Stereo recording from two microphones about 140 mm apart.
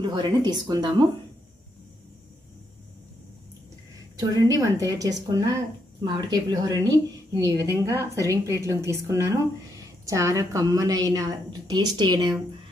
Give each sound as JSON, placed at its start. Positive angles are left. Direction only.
{"t": 0.0, "sound": "speech", "side_deg": -35}
{"t": 4.2, "sound": "a woman's voice", "side_deg": -25}